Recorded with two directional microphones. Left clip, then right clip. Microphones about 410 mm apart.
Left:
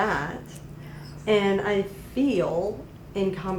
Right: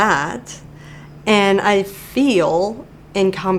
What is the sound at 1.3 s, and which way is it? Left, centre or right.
A woman's voice, right.